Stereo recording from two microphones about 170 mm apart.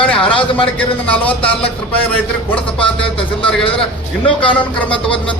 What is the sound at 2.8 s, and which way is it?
Speech, 30° left (ahead or behind).